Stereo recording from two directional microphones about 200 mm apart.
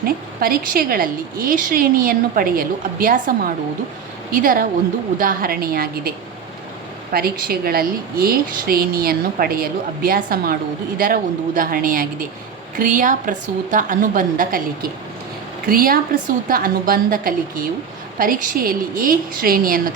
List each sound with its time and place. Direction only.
0.0 s a woman's voice: 45° right (ahead or behind)